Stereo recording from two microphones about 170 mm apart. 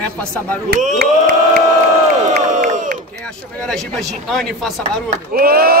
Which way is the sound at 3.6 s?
Centre (ahead or behind).